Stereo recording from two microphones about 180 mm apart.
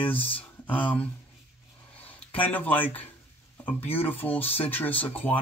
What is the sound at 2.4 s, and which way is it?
Speech, 10° left (ahead or behind).